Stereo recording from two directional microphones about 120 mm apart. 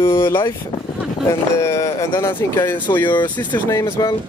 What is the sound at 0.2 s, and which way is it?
Speech, 20° left (ahead or behind).